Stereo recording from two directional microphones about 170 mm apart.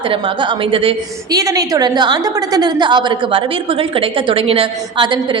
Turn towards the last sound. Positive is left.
turn(degrees=-30)  # may be behind; listen again after turning